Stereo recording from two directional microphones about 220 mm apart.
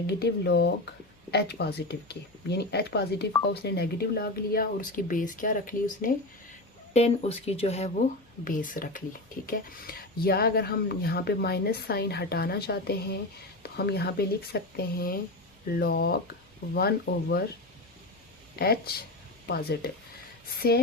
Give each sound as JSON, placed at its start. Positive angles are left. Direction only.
{"t": 0.1, "sound": "speech", "side_deg": 50}
{"t": 6.9, "sound": "speech", "side_deg": 30}
{"t": 18.6, "sound": "speech", "side_deg": 45}